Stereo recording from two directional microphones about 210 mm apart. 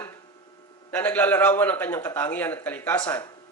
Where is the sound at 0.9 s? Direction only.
10° left (ahead or behind).